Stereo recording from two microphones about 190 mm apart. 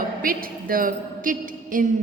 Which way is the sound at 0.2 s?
50° right (ahead or behind).